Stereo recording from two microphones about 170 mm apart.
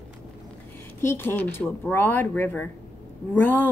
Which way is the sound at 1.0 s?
15° left (ahead or behind).